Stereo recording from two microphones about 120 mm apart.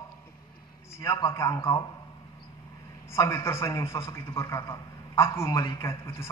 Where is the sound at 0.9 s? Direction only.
25° left (ahead or behind).